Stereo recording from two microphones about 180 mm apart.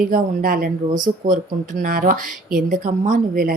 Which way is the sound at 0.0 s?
50° right (ahead or behind).